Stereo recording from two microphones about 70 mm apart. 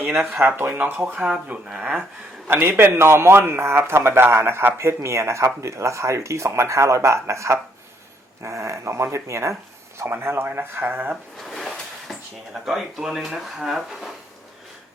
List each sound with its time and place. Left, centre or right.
0.0 s speech: right
1.5 s speech: centre
2.5 s a man's voice: right
11.3 s a sound: centre
12.6 s speech: centre